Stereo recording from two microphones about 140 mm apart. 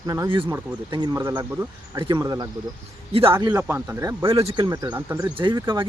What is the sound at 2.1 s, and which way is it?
Speech, 25° right (ahead or behind).